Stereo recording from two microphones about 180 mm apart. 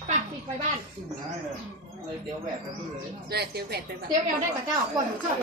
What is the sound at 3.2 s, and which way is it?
Speech, 60° right (ahead or behind).